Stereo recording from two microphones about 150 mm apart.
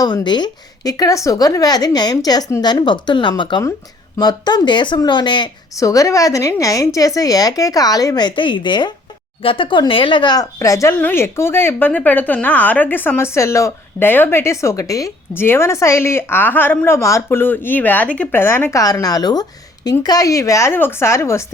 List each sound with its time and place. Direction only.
0.0 s speech: 30° left (ahead or behind)